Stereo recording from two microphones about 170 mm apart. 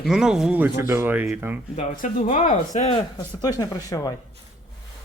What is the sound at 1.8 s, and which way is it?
Speech, 45° left (ahead or behind).